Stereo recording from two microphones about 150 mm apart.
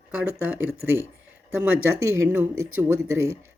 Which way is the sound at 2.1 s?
15° right (ahead or behind).